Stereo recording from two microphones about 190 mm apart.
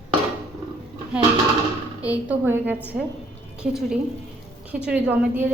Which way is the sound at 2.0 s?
5° right (ahead or behind).